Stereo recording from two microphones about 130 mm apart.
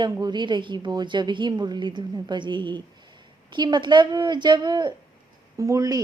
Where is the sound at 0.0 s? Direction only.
35° right (ahead or behind).